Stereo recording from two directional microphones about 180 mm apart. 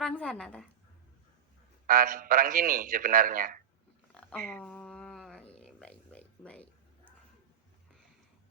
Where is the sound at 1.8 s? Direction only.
50° right (ahead or behind).